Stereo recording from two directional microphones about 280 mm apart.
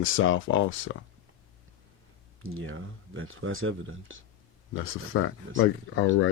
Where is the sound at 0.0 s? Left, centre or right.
Left.